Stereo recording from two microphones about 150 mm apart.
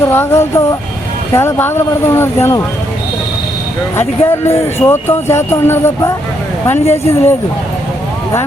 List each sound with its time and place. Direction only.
0.0 s speech: 15° left (ahead or behind)
3.9 s speech: 15° left (ahead or behind)